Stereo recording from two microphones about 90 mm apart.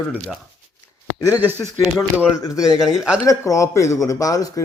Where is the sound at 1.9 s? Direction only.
35° left (ahead or behind).